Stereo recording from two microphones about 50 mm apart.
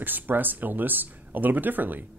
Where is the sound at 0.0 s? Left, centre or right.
Right.